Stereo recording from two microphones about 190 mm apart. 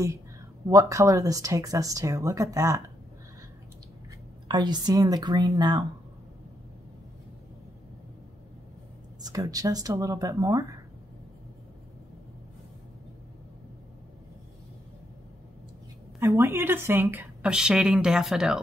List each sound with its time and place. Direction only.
0.7 s speech: 15° right (ahead or behind)
4.5 s speech: 25° right (ahead or behind)
9.2 s speech: 20° right (ahead or behind)
16.2 s a woman's voice: 10° right (ahead or behind)